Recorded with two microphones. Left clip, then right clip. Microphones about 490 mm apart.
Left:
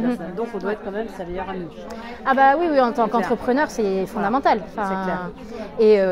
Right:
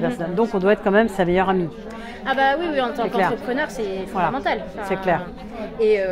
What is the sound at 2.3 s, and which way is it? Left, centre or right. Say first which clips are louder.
Speech: left 3 dB; left.